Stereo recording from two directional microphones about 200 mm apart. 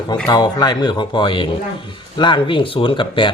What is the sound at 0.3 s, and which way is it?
Speech, 20° left (ahead or behind).